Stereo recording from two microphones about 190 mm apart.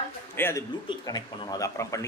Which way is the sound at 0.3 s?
10° left (ahead or behind).